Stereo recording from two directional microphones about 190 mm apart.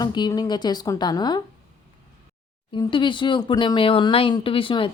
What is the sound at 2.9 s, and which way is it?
Speech, 25° left (ahead or behind).